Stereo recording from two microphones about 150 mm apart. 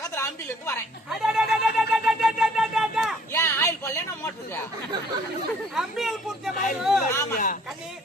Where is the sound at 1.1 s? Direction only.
5° right (ahead or behind).